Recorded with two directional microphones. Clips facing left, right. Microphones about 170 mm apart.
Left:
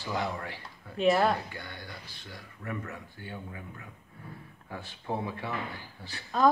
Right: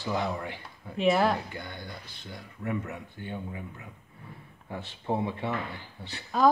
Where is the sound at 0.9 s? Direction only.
Centre (ahead or behind).